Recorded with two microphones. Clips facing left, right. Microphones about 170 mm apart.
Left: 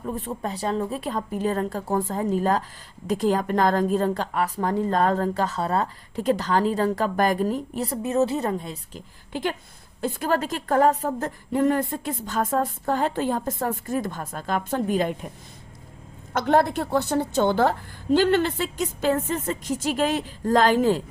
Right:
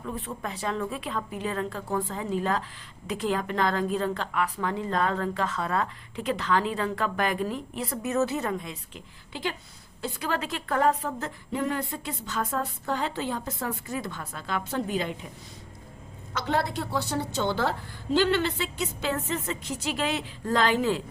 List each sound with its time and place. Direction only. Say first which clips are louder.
0.0 s a woman's voice: left 5 dB; 40° left (ahead or behind)
16.3 s a woman's voice: left 7 dB; 50° left (ahead or behind)